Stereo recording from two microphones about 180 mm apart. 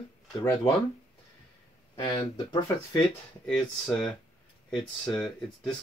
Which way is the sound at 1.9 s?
25° left (ahead or behind).